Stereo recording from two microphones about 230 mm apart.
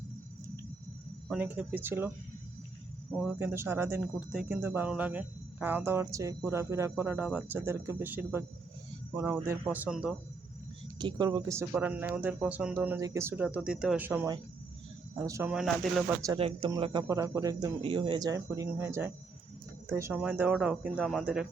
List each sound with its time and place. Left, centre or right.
1.3 s speech: centre
3.1 s speech: centre
3.3 s speech: centre
10.9 s speech: centre
15.5 s speech: centre
16.4 s speech: right; by 21.4 s centre